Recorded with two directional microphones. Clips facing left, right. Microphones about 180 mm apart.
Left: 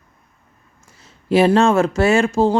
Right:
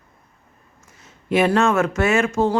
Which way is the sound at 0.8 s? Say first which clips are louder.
Left 4 dB; 30° left (ahead or behind).